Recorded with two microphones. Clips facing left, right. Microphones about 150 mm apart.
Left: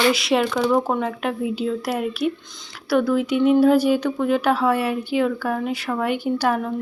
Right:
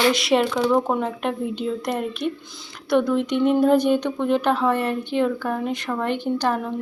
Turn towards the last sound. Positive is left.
turn(degrees=10)  # may be behind; listen again after turning